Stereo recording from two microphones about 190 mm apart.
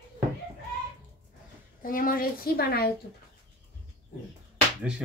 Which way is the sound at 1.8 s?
45° left (ahead or behind).